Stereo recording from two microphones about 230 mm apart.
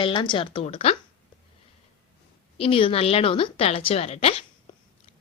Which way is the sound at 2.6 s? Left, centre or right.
Left.